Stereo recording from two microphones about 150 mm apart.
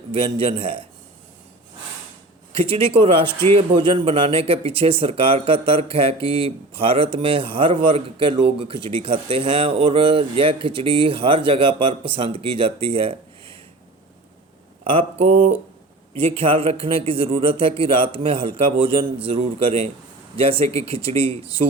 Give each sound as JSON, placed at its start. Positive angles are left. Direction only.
{"t": 0.1, "sound": "speech", "side_deg": -35}
{"t": 2.6, "sound": "speech", "side_deg": -40}
{"t": 3.2, "sound": "a man's voice", "side_deg": 15}
{"t": 3.5, "sound": "speech", "side_deg": -35}
{"t": 14.8, "sound": "speech", "side_deg": -40}